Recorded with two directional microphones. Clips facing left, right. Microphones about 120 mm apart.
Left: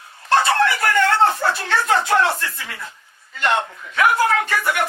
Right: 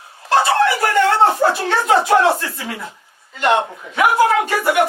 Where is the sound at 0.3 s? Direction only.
15° right (ahead or behind).